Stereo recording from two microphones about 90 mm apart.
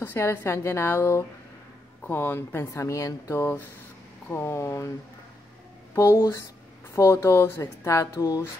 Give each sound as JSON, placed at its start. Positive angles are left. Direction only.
{"t": 0.0, "sound": "a woman's voice", "side_deg": 25}
{"t": 2.6, "sound": "speech", "side_deg": 35}
{"t": 5.9, "sound": "a woman's voice", "side_deg": 30}